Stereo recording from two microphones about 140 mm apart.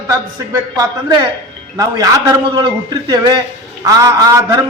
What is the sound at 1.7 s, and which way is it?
Speech, 25° right (ahead or behind).